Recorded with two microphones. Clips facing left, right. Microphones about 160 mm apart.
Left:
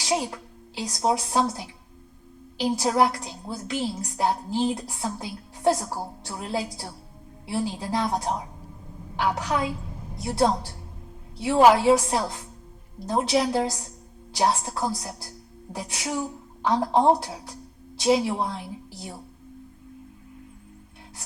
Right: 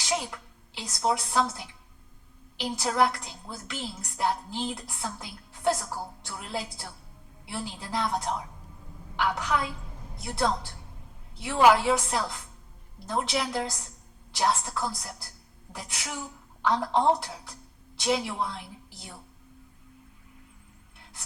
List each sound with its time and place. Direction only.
0.0 s a woman's voice: 35° left (ahead or behind)